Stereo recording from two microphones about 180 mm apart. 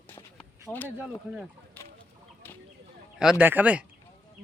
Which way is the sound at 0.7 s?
10° left (ahead or behind).